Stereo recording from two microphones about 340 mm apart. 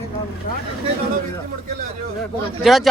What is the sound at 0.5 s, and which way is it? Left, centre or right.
Vehicle, left.